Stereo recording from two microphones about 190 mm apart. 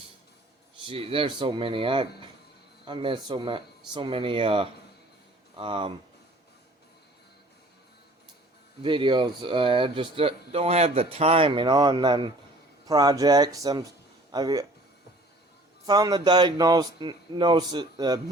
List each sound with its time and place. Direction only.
0.9 s speech: 30° right (ahead or behind)
8.8 s speech: 25° right (ahead or behind)
15.9 s speech: 20° right (ahead or behind)